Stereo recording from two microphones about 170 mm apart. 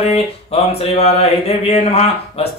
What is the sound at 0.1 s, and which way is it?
Speech, 35° left (ahead or behind).